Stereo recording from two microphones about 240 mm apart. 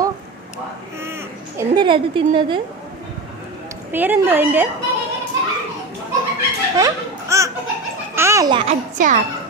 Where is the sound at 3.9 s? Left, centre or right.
Centre.